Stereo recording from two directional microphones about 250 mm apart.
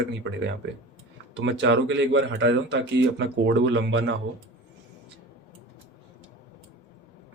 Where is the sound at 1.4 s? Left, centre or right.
Right.